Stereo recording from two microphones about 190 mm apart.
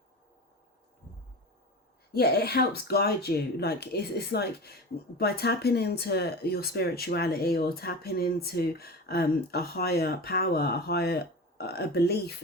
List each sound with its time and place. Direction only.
2.1 s speech: 55° left (ahead or behind)